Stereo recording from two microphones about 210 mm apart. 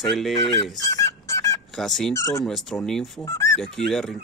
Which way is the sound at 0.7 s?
15° left (ahead or behind).